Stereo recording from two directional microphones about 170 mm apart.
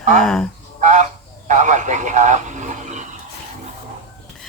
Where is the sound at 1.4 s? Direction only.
45° right (ahead or behind).